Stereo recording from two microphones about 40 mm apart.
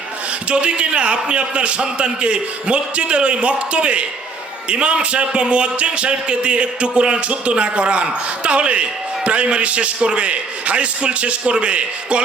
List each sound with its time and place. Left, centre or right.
0.5 s a man's voice: right